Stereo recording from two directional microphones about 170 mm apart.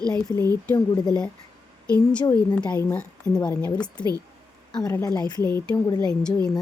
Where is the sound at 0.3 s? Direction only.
20° right (ahead or behind).